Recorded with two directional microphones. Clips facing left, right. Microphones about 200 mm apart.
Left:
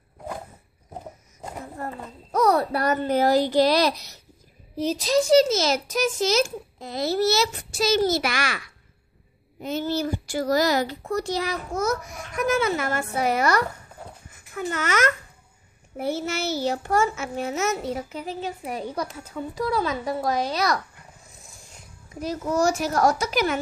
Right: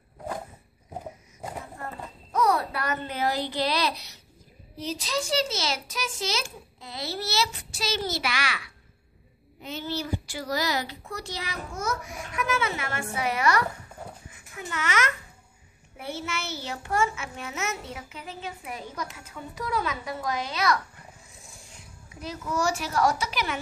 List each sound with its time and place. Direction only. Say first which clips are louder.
2.3 s a child's voice: left 4 dB; 40° left (ahead or behind)
22.1 s a child's voice: left 6 dB; 40° left (ahead or behind)